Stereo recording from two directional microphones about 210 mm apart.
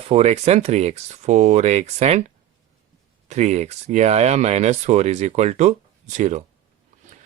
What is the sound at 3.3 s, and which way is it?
Speech, 35° right (ahead or behind).